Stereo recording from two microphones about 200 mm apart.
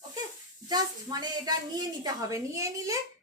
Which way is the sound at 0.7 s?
20° right (ahead or behind).